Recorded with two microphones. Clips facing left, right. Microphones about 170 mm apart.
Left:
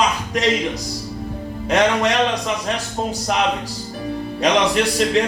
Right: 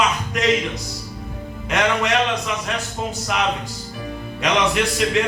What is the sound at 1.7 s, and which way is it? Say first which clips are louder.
Speech: left 3 dB; 35° left (ahead or behind).